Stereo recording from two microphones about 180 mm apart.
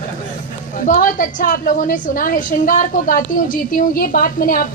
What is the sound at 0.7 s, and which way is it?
A woman's voice, 45° left (ahead or behind).